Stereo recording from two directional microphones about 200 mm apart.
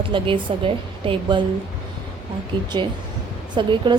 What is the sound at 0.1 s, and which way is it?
A woman's voice, 25° right (ahead or behind).